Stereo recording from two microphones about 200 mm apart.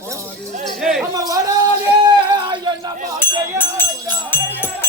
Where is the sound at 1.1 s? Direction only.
20° right (ahead or behind).